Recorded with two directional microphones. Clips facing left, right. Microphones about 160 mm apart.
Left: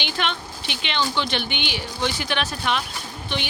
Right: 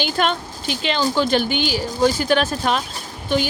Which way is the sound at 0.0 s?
45° right (ahead or behind).